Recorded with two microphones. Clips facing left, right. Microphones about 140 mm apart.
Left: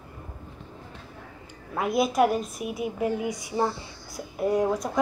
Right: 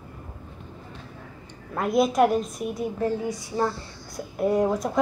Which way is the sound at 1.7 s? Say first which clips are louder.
Right 2 dB; centre (ahead or behind).